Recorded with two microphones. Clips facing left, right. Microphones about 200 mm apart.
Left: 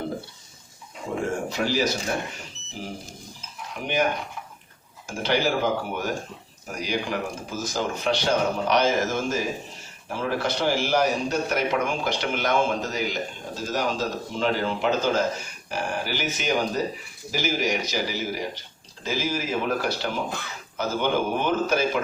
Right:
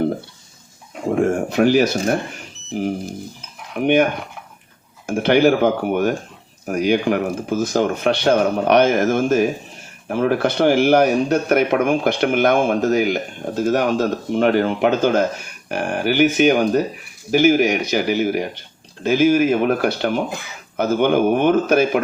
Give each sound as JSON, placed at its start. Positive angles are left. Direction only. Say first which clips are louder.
{"t": 1.1, "sound": "speech", "louder": "right 9 dB", "side_deg": -55}
{"t": 3.8, "sound": "speech", "louder": "right 11 dB", "side_deg": -60}
{"t": 5.0, "sound": "speech", "louder": "right 10 dB", "side_deg": -60}